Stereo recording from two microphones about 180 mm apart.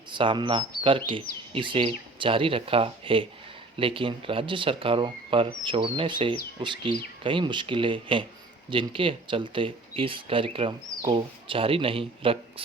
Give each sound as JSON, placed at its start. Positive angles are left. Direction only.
{"t": 0.1, "sound": "speech", "side_deg": -25}